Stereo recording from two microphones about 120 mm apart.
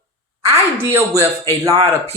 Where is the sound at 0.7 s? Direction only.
25° right (ahead or behind).